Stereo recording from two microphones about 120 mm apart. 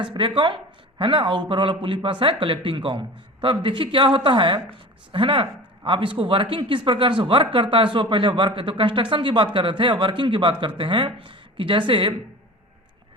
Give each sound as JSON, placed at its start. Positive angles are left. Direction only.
{"t": 0.0, "sound": "speech", "side_deg": -40}